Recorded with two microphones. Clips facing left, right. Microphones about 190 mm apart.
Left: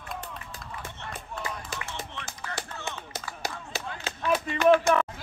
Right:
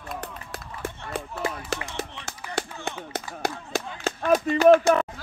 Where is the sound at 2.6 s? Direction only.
60° right (ahead or behind); by 5.1 s 40° right (ahead or behind).